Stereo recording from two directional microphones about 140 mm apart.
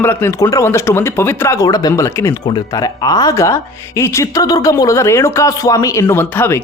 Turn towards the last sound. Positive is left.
turn(degrees=15)  # may be behind; listen again after turning